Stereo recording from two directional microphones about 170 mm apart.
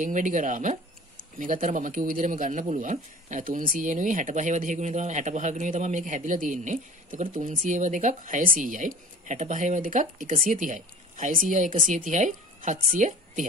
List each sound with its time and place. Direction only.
0.0 s speech: 50° right (ahead or behind)